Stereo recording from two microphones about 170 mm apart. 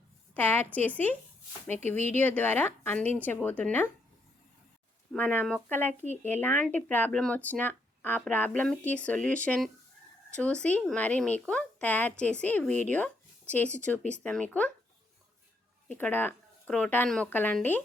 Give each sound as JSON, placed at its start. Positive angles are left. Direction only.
{"t": 0.3, "sound": "speech", "side_deg": 10}
{"t": 2.0, "sound": "speech", "side_deg": -45}
{"t": 2.2, "sound": "speech", "side_deg": 10}
{"t": 5.1, "sound": "speech", "side_deg": 10}
{"t": 15.9, "sound": "speech", "side_deg": 10}